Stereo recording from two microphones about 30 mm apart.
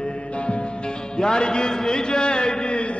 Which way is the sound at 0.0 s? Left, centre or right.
Left.